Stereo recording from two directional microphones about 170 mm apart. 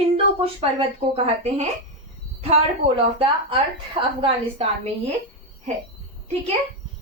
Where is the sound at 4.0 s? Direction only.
35° right (ahead or behind).